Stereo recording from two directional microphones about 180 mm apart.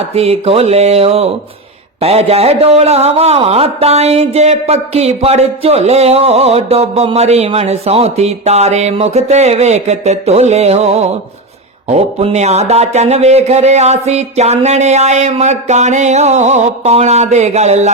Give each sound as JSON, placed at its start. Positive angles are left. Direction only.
{"t": 0.1, "sound": "a man's voice", "side_deg": -35}